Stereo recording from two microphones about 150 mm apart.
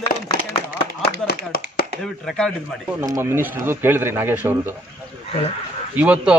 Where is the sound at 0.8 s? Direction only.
90° left.